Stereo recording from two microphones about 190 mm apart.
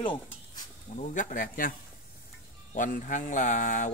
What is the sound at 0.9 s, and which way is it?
Speech, 40° left (ahead or behind).